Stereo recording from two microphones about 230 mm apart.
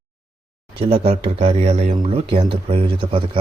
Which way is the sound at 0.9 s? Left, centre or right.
Right.